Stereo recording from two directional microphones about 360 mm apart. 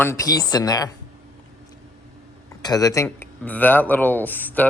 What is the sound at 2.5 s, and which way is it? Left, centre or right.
Speech, centre.